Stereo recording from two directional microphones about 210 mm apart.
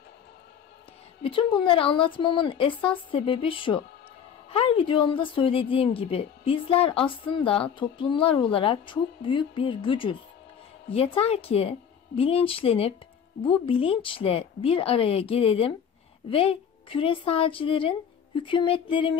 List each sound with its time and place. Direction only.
1.2 s a woman's voice: 25° left (ahead or behind)